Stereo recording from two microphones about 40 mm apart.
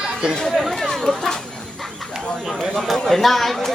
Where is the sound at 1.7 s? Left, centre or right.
Centre.